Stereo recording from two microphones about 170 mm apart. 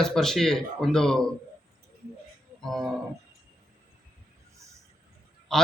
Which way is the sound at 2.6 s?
Centre (ahead or behind).